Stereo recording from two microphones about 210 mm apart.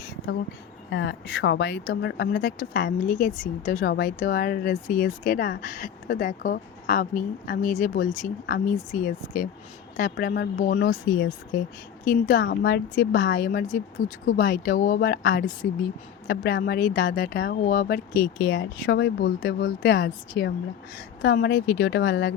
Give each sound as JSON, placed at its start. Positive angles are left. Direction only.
{"t": 0.9, "sound": "speech", "side_deg": 55}
{"t": 12.0, "sound": "speech", "side_deg": 40}